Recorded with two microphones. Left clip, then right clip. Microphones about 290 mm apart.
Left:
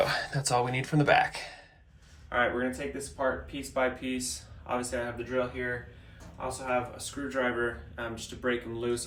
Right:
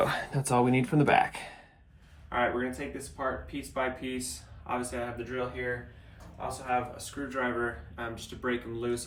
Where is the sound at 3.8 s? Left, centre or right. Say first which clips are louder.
Left 3 dB; centre.